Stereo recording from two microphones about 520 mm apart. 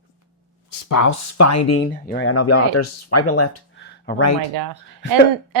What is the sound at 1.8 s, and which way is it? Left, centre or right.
Speech, centre.